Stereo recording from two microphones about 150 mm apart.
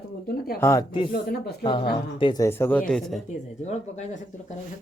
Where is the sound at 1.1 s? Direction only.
90° left.